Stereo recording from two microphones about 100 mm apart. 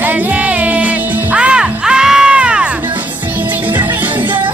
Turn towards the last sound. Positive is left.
turn(degrees=-10)  # may be behind; listen again after turning